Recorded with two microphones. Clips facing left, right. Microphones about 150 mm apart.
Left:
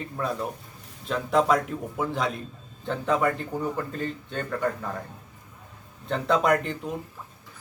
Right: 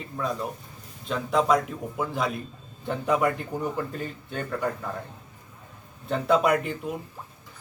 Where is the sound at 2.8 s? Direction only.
15° right (ahead or behind).